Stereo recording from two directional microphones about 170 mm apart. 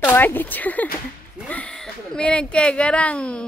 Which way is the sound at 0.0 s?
10° left (ahead or behind).